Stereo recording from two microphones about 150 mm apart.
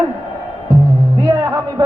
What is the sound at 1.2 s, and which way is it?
Speech, 25° right (ahead or behind).